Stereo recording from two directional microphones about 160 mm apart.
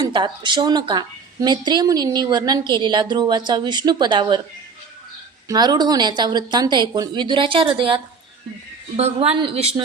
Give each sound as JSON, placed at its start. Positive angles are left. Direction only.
{"t": 0.0, "sound": "a woman's voice", "side_deg": -30}
{"t": 5.5, "sound": "a woman's voice", "side_deg": -25}